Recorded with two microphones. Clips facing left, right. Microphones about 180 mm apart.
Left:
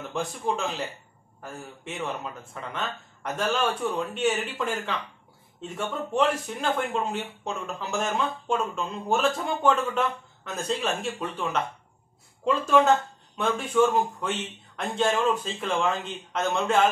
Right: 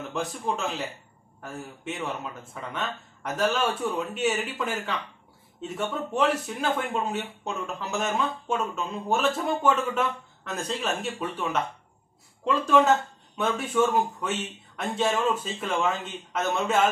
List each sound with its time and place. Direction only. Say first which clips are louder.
0.1 s speech: left 2 dB; centre (ahead or behind)
6.1 s speech: left 1 dB; centre (ahead or behind)
12.4 s speech: even; centre (ahead or behind)